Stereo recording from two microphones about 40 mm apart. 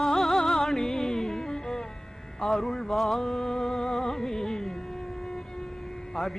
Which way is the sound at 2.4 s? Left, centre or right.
Centre.